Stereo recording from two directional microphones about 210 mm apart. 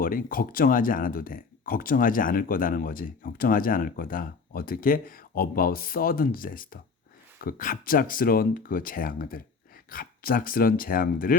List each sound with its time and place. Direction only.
0.0 s speech: 40° left (ahead or behind)